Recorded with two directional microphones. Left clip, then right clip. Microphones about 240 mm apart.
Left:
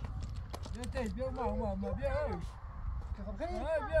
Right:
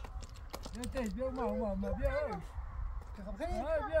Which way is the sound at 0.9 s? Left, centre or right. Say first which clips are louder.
Even; left.